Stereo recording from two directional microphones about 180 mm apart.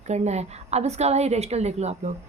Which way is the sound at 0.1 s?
40° right (ahead or behind).